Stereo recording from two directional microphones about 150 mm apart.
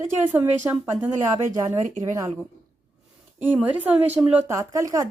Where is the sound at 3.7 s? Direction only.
10° right (ahead or behind).